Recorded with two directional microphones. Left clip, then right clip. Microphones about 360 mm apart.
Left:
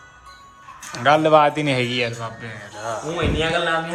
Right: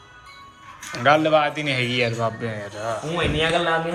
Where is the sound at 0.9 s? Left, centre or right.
Centre.